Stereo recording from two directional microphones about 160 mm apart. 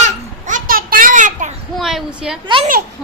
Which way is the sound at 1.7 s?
Centre (ahead or behind).